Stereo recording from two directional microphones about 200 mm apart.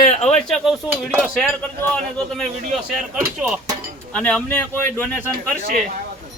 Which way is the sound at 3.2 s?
5° right (ahead or behind).